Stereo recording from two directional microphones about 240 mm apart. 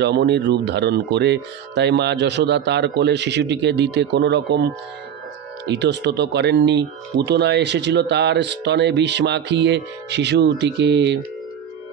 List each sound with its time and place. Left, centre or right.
0.0 s speech: right
5.7 s speech: right